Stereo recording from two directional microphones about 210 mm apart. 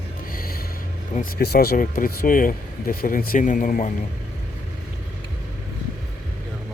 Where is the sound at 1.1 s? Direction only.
45° left (ahead or behind).